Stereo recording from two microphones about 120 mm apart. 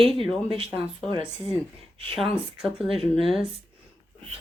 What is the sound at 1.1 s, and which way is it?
Speech, 45° right (ahead or behind).